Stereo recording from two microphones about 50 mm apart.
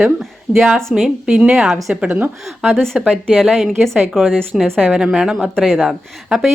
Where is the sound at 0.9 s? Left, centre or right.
Centre.